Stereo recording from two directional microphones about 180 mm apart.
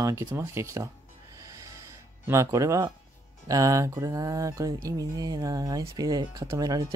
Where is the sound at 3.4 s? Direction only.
20° right (ahead or behind).